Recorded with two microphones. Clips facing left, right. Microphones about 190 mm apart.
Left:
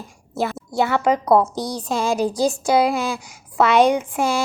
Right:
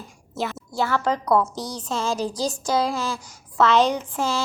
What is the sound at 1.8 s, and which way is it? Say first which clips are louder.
A woman's voice: left 5 dB; 15° left (ahead or behind).